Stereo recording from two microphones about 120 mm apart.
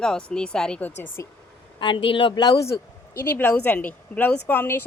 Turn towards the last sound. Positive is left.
turn(degrees=15)  # may be behind; listen again after turning